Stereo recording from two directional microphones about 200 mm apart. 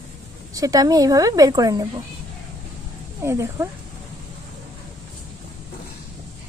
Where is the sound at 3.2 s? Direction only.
15° right (ahead or behind).